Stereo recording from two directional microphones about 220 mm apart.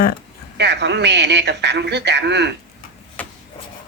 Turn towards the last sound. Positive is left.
turn(degrees=5)  # may be behind; listen again after turning